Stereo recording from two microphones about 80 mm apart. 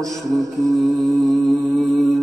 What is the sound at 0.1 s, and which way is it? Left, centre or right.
Mantra, right.